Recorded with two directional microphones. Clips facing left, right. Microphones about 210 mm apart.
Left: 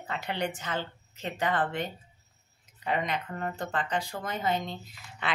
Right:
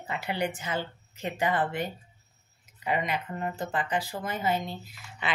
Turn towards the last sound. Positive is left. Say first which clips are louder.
# right 1 dB
turn(degrees=-5)  # may be behind; listen again after turning